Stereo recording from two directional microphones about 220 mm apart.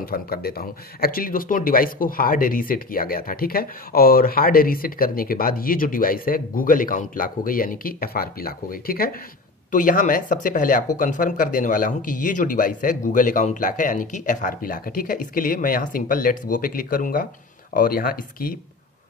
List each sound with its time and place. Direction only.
0.0 s speech: 45° left (ahead or behind)